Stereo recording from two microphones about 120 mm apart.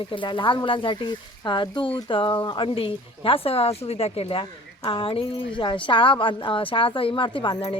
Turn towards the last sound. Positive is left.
turn(degrees=45)  # may be behind; listen again after turning